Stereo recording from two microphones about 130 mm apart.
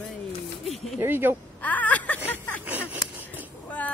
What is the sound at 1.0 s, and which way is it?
Speech, 15° right (ahead or behind).